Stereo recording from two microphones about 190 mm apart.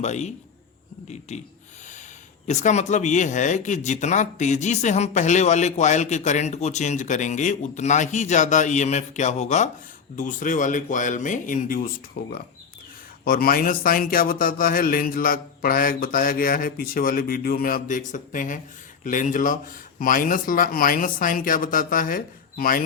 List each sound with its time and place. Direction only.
0.0 s speech: 35° left (ahead or behind)
2.5 s a man's voice: 40° left (ahead or behind)
12.2 s a man's voice: 55° left (ahead or behind)